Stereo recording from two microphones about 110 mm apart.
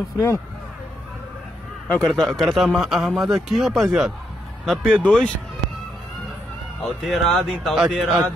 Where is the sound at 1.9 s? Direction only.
10° left (ahead or behind).